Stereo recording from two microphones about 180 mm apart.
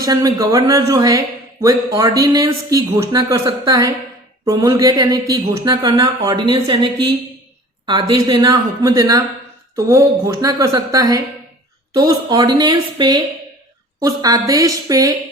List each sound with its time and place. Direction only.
0.0 s speech: 20° right (ahead or behind)